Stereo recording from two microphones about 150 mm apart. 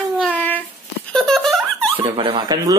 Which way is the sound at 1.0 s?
Centre (ahead or behind).